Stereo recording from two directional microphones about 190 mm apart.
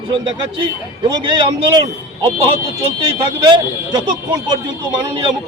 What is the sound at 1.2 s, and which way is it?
A man's voice, 25° right (ahead or behind).